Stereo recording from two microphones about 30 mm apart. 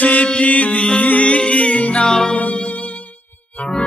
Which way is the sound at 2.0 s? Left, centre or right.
Left.